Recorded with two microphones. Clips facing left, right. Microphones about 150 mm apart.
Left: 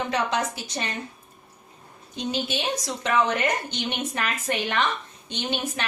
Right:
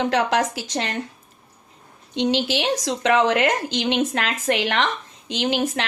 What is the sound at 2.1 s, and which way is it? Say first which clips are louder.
A woman's voice: right 7 dB; 90° right.